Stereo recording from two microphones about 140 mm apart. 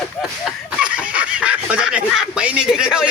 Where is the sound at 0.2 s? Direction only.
5° right (ahead or behind).